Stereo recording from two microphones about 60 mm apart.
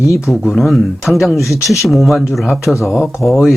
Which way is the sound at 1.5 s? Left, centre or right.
Left.